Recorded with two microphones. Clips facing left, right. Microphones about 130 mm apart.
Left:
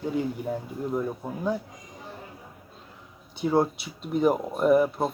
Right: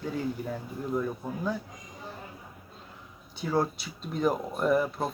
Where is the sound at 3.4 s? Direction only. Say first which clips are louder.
Left 5 dB; 20° left (ahead or behind).